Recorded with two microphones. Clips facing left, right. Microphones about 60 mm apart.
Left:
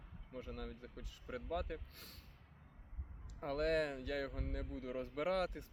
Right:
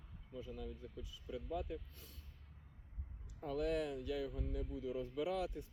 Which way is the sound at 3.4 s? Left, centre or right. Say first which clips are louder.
Left 2 dB; left.